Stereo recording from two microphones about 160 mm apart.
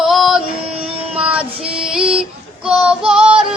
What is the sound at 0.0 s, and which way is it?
Music, centre (ahead or behind).